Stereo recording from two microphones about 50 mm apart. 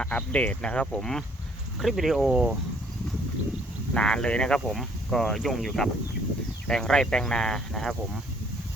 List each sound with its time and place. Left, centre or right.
0.0 s speech: left
1.8 s speech: centre
3.9 s speech: centre
4.7 s speech: centre